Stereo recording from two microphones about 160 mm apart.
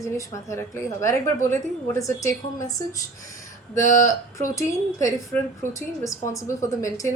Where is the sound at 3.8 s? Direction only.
50° left (ahead or behind).